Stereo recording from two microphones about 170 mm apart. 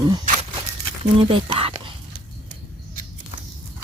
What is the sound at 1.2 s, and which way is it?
Speech, 30° right (ahead or behind).